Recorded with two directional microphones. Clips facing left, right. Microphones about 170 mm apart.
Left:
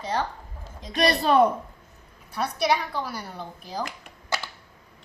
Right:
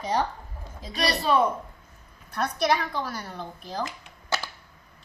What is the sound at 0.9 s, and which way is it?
Speech, 50° left (ahead or behind).